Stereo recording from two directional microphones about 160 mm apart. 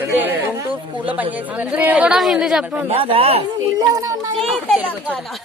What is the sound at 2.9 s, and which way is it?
Speech, 35° right (ahead or behind).